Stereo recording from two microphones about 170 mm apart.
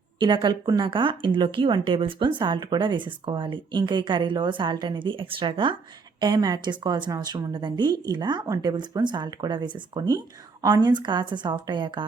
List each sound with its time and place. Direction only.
0.2 s speech: 25° right (ahead or behind)